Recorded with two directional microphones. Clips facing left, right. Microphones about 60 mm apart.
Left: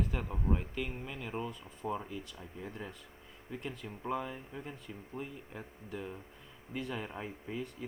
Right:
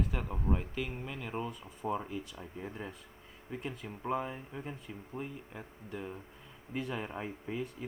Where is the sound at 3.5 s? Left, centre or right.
Centre.